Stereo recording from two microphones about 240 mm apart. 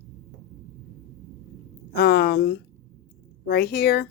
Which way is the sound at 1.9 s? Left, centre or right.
Left.